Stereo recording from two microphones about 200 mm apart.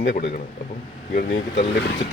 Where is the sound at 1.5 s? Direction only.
35° left (ahead or behind).